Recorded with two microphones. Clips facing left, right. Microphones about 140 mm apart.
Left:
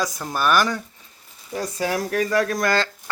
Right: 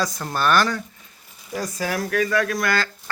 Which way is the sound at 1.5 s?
30° left (ahead or behind).